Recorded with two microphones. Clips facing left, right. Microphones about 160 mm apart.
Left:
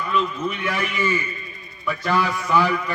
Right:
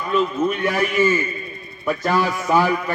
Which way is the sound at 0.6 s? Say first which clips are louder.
Right 6 dB; 45° right (ahead or behind).